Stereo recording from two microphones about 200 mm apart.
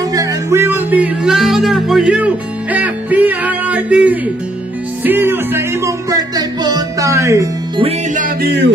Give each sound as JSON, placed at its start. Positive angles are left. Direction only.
{"t": 0.1, "sound": "music", "side_deg": -15}
{"t": 5.0, "sound": "speech", "side_deg": -10}
{"t": 7.8, "sound": "music", "side_deg": -40}
{"t": 8.5, "sound": "music", "side_deg": -60}